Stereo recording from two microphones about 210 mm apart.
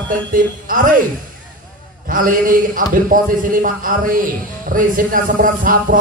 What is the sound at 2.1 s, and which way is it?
A man's voice, 40° right (ahead or behind).